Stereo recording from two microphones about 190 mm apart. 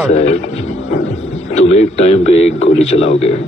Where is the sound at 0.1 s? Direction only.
35° left (ahead or behind).